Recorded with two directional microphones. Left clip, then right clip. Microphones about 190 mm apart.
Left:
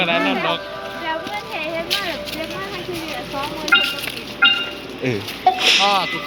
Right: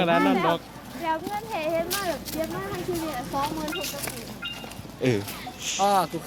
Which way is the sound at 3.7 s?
50° left (ahead or behind).